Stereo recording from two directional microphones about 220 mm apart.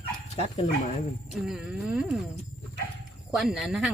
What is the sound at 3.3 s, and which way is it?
Speech, centre (ahead or behind).